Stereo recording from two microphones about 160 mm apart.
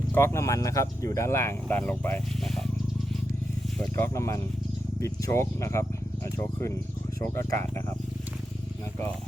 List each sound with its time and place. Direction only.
0.1 s speech: 15° left (ahead or behind)
3.8 s speech: 15° left (ahead or behind)